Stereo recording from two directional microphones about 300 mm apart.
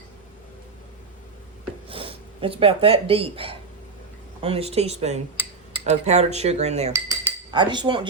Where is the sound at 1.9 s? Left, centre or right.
Centre.